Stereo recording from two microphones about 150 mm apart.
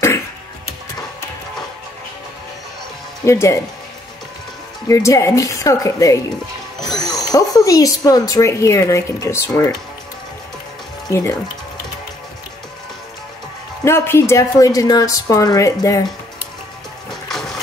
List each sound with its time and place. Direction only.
3.3 s speech: 20° left (ahead or behind)
4.8 s speech: 20° left (ahead or behind)
7.2 s speech: 25° left (ahead or behind)
11.1 s speech: 20° left (ahead or behind)
13.8 s speech: 15° left (ahead or behind)
17.3 s a sound: centre (ahead or behind)